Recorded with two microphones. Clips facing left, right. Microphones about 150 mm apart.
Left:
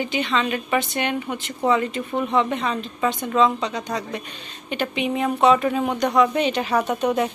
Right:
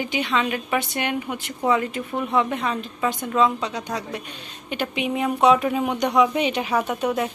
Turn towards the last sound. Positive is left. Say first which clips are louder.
# left 2 dB
turn(degrees=-5)  # may be behind; listen again after turning